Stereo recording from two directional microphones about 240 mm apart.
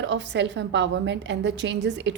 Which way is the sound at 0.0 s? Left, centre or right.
Right.